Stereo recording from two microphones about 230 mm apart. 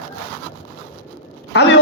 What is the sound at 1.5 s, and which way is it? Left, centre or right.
Speech, left.